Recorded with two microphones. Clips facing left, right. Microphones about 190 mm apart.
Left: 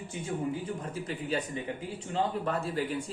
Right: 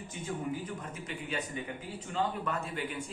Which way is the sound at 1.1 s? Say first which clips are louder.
Left 4 dB; 35° left (ahead or behind).